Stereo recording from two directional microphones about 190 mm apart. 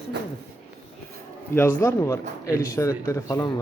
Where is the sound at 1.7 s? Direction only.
15° left (ahead or behind).